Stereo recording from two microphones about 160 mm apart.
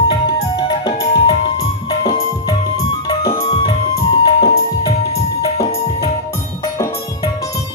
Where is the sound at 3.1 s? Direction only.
25° left (ahead or behind).